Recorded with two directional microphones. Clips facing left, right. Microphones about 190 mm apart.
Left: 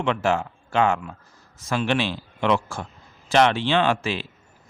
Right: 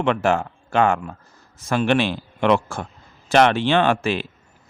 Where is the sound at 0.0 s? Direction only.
55° right (ahead or behind).